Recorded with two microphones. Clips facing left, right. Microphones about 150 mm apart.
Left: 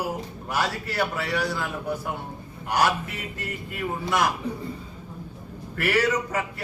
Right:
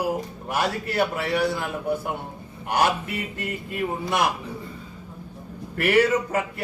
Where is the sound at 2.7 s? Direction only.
25° right (ahead or behind).